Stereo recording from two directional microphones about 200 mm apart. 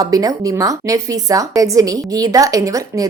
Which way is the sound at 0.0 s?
20° right (ahead or behind).